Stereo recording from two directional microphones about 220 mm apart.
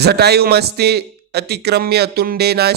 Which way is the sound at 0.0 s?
50° right (ahead or behind).